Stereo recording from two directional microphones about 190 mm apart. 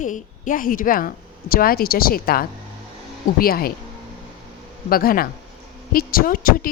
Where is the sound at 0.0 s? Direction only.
45° left (ahead or behind).